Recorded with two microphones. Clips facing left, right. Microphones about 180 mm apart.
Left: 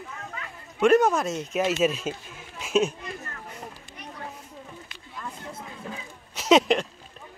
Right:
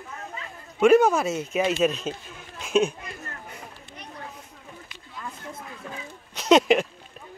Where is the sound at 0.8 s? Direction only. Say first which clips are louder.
Right 2 dB; centre (ahead or behind).